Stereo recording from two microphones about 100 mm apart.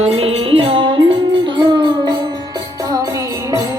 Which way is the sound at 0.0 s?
80° right.